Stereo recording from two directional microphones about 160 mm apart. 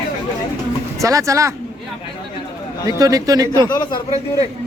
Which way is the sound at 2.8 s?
20° right (ahead or behind).